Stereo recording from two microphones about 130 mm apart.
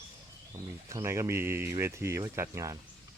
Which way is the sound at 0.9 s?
25° right (ahead or behind).